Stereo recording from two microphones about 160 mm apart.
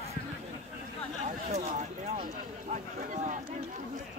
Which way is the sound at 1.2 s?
45° right (ahead or behind).